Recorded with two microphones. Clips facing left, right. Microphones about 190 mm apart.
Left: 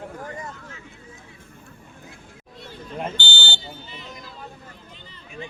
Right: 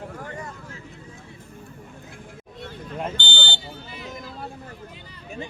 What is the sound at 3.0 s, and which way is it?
Buzzer, 10° left (ahead or behind).